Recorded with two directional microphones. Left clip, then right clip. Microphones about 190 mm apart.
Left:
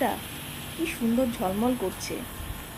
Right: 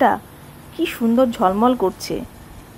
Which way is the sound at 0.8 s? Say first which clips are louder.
Right 10 dB; 25° right (ahead or behind).